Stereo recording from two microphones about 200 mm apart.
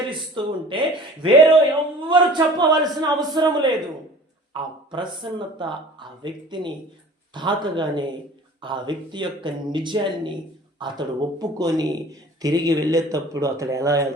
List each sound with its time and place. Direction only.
0.4 s speech: 25° right (ahead or behind)